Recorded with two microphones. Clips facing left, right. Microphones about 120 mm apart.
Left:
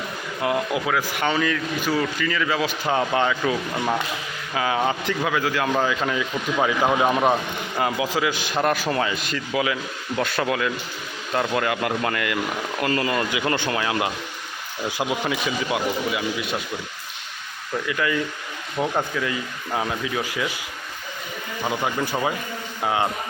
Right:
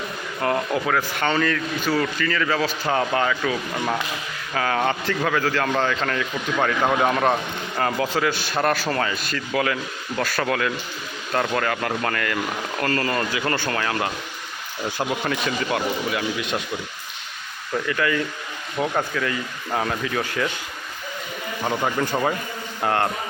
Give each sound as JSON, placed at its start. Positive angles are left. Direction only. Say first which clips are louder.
{"t": 0.4, "sound": "a man's voice", "louder": "right 1 dB", "side_deg": 10}
{"t": 3.2, "sound": "speech", "louder": "left 1 dB", "side_deg": 20}
{"t": 4.5, "sound": "a man's voice", "louder": "even", "side_deg": 10}
{"t": 9.5, "sound": "a man's voice", "louder": "right 1 dB", "side_deg": 5}
{"t": 10.2, "sound": "speech", "louder": "left 1 dB", "side_deg": 20}
{"t": 10.4, "sound": "a man's voice", "louder": "even", "side_deg": 5}
{"t": 17.8, "sound": "a man's voice", "louder": "right 1 dB", "side_deg": 15}
{"t": 21.7, "sound": "speech", "louder": "right 2 dB", "side_deg": 5}